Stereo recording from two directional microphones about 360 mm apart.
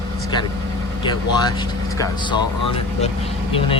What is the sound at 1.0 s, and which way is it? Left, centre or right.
Speech, centre.